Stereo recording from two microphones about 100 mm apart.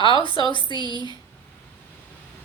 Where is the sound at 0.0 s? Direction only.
55° left (ahead or behind).